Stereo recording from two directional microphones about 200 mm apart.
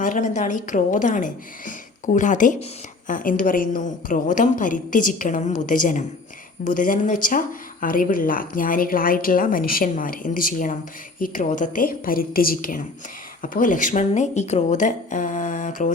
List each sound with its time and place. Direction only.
0.0 s a woman's voice: 40° left (ahead or behind)